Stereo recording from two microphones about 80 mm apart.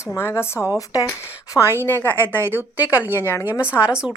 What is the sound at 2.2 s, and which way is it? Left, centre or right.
A woman's voice, right.